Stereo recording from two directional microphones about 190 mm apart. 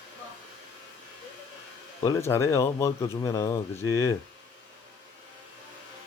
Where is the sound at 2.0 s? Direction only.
15° left (ahead or behind).